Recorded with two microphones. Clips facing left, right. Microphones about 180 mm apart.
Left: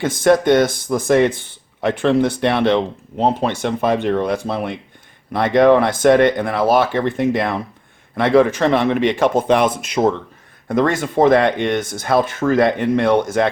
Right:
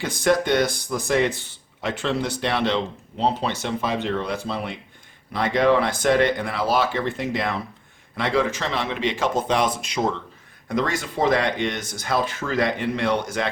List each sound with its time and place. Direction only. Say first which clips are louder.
0.0 s speech: left 7 dB; 50° left (ahead or behind)